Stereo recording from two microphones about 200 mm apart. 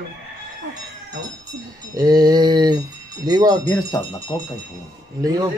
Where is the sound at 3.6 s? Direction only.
15° left (ahead or behind).